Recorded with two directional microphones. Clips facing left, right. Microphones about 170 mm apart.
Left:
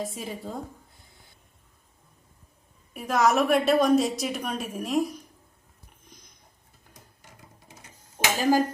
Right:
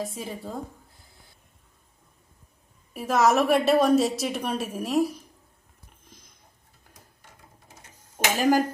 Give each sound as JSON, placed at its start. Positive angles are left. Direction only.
{"t": 0.0, "sound": "a sound", "side_deg": 0}
{"t": 2.9, "sound": "a woman's voice", "side_deg": 0}
{"t": 8.4, "sound": "speech", "side_deg": -15}